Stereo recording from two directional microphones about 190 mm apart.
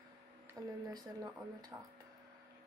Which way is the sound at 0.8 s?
20° right (ahead or behind).